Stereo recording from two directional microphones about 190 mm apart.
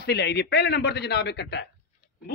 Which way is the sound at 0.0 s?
60° left (ahead or behind).